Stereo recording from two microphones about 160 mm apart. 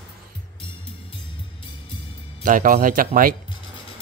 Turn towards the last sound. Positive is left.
turn(degrees=-60)  # may be behind; listen again after turning